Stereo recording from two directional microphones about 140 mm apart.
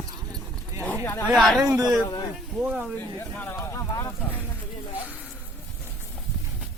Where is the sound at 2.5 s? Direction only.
10° right (ahead or behind).